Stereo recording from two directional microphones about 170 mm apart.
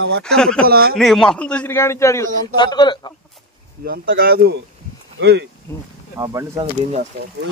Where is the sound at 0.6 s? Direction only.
65° right (ahead or behind).